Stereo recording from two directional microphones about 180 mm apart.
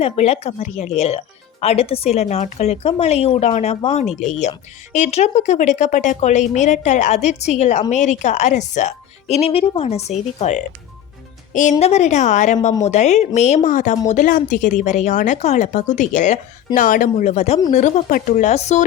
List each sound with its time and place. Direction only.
0.0 s speech: 35° left (ahead or behind)
11.8 s speech: 35° left (ahead or behind)